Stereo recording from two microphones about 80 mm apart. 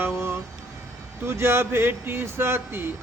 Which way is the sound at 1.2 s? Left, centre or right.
Right.